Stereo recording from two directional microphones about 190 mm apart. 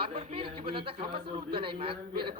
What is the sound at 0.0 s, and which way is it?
Speech, 30° right (ahead or behind).